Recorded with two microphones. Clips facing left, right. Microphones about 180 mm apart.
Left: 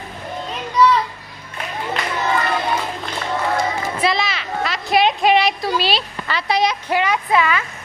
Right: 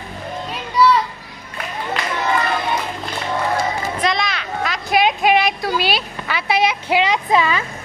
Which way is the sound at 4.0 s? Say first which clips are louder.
Left 2 dB; 5° left (ahead or behind).